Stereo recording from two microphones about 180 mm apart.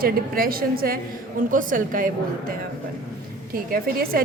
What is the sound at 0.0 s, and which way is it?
A woman's voice, 55° right (ahead or behind).